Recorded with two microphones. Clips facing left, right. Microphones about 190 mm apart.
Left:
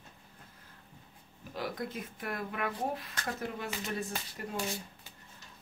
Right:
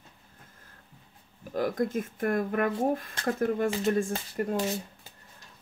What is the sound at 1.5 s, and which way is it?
Speech, 50° right (ahead or behind).